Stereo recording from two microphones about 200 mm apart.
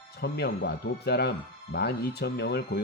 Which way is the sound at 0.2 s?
55° left (ahead or behind).